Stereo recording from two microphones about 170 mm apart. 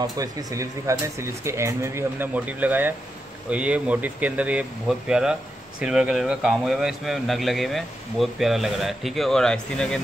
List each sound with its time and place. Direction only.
0.0 s speech: 20° right (ahead or behind); by 9.9 s 5° left (ahead or behind)